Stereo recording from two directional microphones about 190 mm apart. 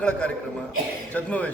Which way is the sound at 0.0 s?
5° left (ahead or behind).